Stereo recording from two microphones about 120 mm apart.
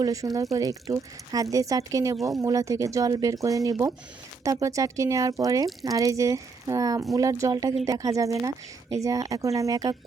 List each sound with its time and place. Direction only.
0.0 s speech: 30° right (ahead or behind)